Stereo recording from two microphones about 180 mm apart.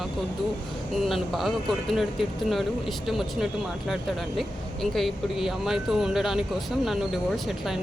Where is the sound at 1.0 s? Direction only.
Centre (ahead or behind).